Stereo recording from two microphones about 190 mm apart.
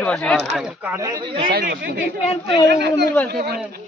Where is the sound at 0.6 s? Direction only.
10° right (ahead or behind); by 1.5 s 25° right (ahead or behind).